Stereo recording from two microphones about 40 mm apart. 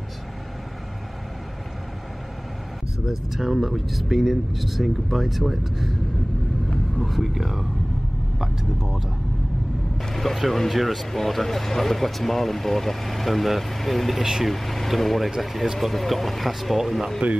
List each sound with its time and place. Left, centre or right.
3.1 s speech: centre
7.0 s speech: centre
10.0 s speech: centre